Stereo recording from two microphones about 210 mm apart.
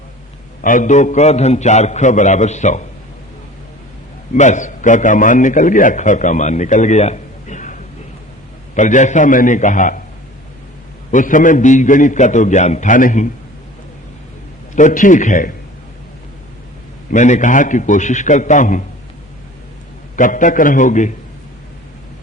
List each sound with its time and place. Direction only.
0.6 s a man's voice: 40° left (ahead or behind)
4.4 s a man's voice: 35° left (ahead or behind)
11.1 s a man's voice: 40° left (ahead or behind)
14.8 s a man's voice: 35° left (ahead or behind)
17.1 s a man's voice: 35° left (ahead or behind)
20.1 s a man's voice: 40° left (ahead or behind)